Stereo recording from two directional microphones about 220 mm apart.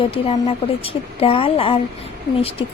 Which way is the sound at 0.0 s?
25° left (ahead or behind).